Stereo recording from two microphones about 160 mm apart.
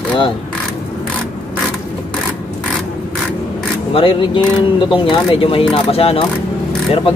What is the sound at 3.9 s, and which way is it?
Speech, 35° left (ahead or behind).